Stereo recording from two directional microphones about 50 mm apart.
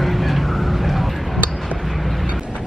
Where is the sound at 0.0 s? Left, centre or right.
Centre.